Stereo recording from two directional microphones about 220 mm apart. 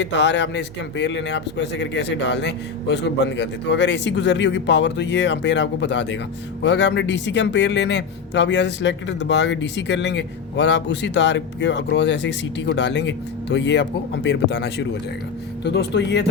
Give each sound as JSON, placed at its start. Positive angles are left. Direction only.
{"t": 0.0, "sound": "a man's voice", "side_deg": 55}